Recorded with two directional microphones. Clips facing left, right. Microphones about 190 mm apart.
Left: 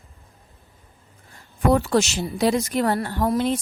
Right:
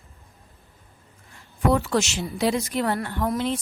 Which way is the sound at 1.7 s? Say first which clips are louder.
Left 3 dB; 35° left (ahead or behind).